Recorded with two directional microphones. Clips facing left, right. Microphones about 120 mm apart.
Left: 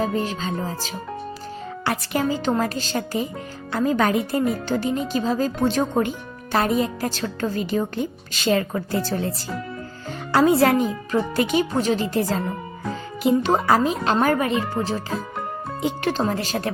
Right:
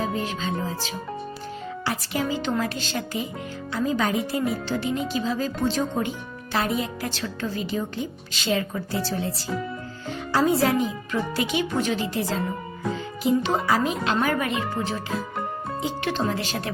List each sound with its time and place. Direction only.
0.0 s speech: 40° left (ahead or behind)
1.8 s speech: 55° left (ahead or behind)
3.7 s speech: 55° left (ahead or behind)
4.7 s speech: 45° left (ahead or behind)
10.3 s speech: 65° left (ahead or behind)
10.8 s speech: 45° left (ahead or behind)
16.0 s speech: 40° left (ahead or behind)